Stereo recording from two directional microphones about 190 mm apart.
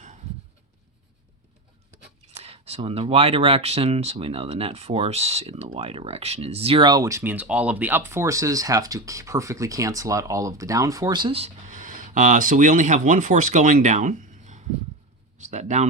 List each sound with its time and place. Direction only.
2.4 s speech: 35° right (ahead or behind)